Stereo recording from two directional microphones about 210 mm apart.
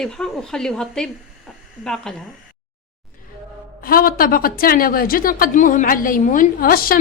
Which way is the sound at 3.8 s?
45° left (ahead or behind).